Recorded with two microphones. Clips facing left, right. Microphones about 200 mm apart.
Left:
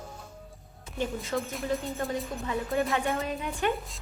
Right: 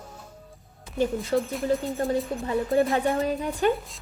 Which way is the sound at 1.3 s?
35° right (ahead or behind).